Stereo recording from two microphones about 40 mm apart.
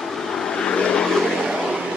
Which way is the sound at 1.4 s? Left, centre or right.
Centre.